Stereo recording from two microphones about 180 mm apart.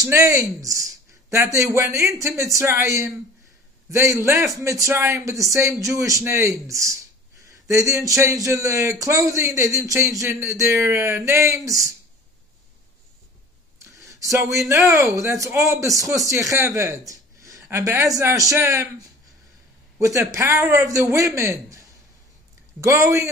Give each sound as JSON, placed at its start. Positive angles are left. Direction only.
{"t": 0.0, "sound": "speech", "side_deg": -15}
{"t": 13.8, "sound": "speech", "side_deg": -15}
{"t": 20.0, "sound": "speech", "side_deg": -15}